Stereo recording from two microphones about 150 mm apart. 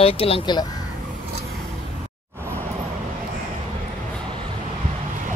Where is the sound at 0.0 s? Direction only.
40° left (ahead or behind).